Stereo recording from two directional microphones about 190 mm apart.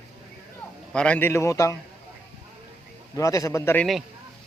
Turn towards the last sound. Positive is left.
turn(degrees=15)  # may be behind; listen again after turning